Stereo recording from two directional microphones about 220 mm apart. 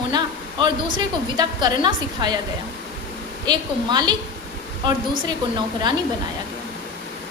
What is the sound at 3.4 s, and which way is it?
Speech, 20° right (ahead or behind).